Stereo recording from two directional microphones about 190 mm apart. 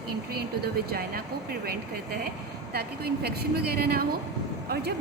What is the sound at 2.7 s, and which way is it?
A woman's voice, 55° right (ahead or behind).